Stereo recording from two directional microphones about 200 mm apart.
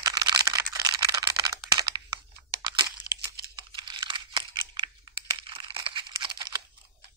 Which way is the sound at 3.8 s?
25° right (ahead or behind).